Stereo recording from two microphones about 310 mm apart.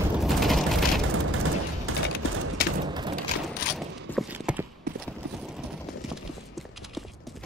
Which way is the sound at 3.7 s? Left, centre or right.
Centre.